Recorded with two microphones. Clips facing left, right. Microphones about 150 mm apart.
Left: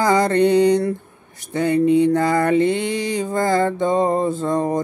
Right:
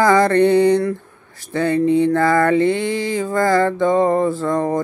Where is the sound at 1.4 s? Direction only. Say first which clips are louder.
Even; 20° left (ahead or behind).